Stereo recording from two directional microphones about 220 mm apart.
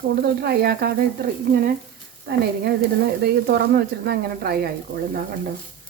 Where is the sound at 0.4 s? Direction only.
45° right (ahead or behind).